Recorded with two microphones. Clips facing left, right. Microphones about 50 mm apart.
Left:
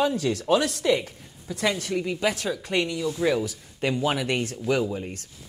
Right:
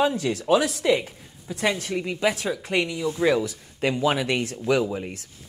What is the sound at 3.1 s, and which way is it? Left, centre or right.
Speech, right.